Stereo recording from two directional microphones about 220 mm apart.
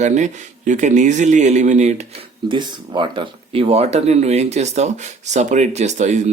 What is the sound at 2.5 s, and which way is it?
Speech, 20° right (ahead or behind).